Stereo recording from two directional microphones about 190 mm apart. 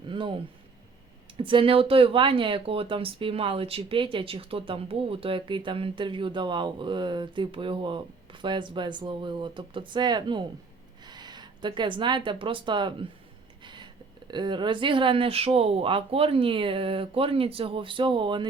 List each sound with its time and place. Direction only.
0.1 s speech: 25° right (ahead or behind)